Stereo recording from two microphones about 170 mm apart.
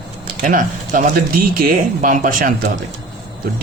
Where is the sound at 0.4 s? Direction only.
50° right (ahead or behind).